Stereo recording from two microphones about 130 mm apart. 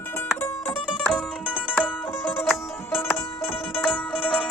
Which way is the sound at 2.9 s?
20° left (ahead or behind).